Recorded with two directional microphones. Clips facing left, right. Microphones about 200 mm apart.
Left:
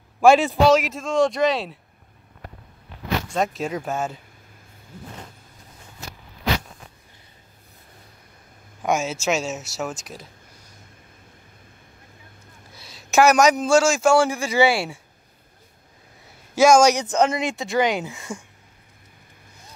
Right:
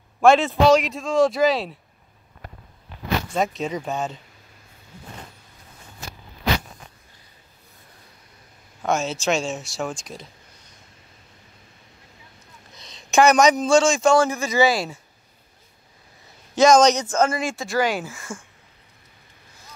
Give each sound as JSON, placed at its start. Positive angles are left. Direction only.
{"t": 0.5, "sound": "a man's voice", "side_deg": 0}
{"t": 3.3, "sound": "a man's voice", "side_deg": 5}
{"t": 8.8, "sound": "a man's voice", "side_deg": 10}
{"t": 12.7, "sound": "a man's voice", "side_deg": 5}
{"t": 16.5, "sound": "speech", "side_deg": 10}